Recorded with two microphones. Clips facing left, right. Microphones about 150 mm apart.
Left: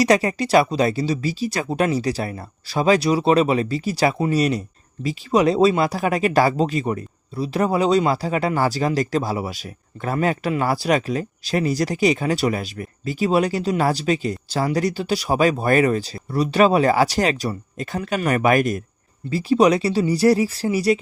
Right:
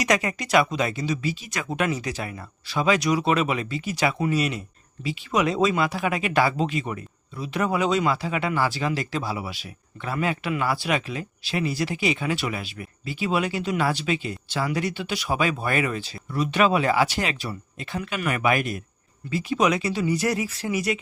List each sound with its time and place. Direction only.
0.0 s speech: 35° left (ahead or behind)